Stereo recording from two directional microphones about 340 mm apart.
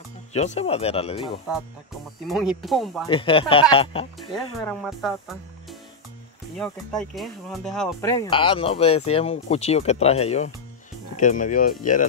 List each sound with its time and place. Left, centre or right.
0.3 s speech: centre
2.2 s speech: centre
3.1 s speech: centre
4.6 s speech: centre; by 12.1 s left